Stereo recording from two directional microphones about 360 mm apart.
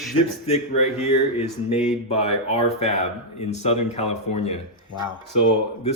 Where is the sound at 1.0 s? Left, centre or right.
Centre.